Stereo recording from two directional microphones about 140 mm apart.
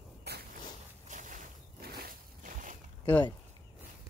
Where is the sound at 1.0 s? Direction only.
65° right (ahead or behind).